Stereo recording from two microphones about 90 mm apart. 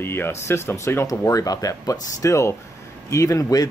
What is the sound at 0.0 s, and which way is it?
Speech, 25° left (ahead or behind).